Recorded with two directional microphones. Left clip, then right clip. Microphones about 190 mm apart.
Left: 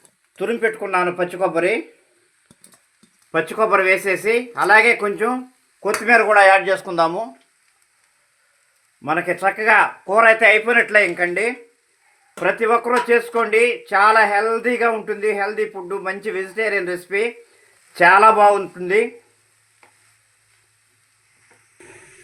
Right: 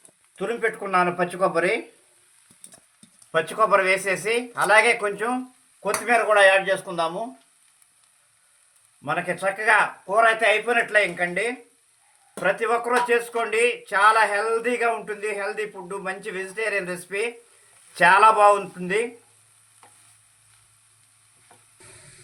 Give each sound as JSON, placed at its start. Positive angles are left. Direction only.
{"t": 0.3, "sound": "speech", "side_deg": 35}
{"t": 3.3, "sound": "speech", "side_deg": 40}
{"t": 9.0, "sound": "speech", "side_deg": 45}